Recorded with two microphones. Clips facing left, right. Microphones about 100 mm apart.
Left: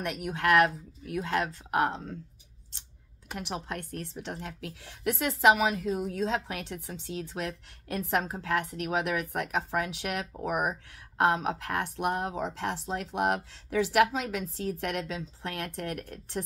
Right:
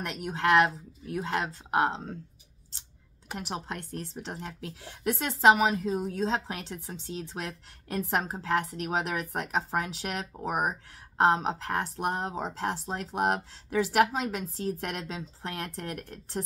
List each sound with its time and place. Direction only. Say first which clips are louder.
0.1 s speech: right 1 dB; 30° right (ahead or behind)
3.3 s speech: even; 35° right (ahead or behind)